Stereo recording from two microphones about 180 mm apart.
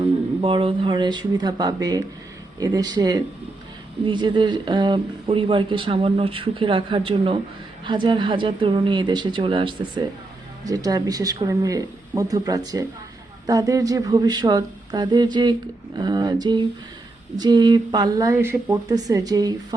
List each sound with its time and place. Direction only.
0.4 s speech: 30° right (ahead or behind)
18.3 s speech: 10° right (ahead or behind)
18.7 s speech: 20° right (ahead or behind)